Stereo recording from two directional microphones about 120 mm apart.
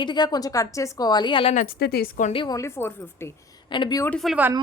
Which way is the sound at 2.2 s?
90° left.